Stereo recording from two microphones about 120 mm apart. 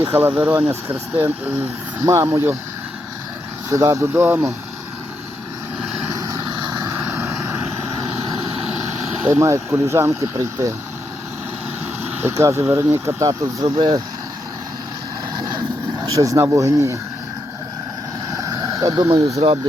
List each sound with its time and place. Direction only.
0.2 s speech: 15° right (ahead or behind)
3.7 s speech: 25° right (ahead or behind)
6.1 s vehicle: 30° right (ahead or behind)
7.1 s vehicle: 20° right (ahead or behind)
8.5 s vehicle: 60° right (ahead or behind)
9.3 s speech: 25° right (ahead or behind)
12.3 s speech: 25° right (ahead or behind); by 14.0 s 45° right (ahead or behind)
15.4 s vehicle: 35° right (ahead or behind)
18.3 s a sound: 30° right (ahead or behind)
19.4 s speech: 50° right (ahead or behind)